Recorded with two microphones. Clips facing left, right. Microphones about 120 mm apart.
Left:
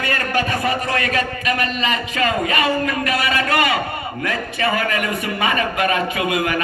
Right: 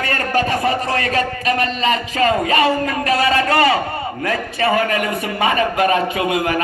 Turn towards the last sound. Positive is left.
turn(degrees=-30)  # may be behind; listen again after turning